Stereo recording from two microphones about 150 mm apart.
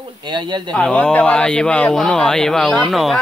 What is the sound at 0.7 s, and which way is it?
Speech, 5° left (ahead or behind).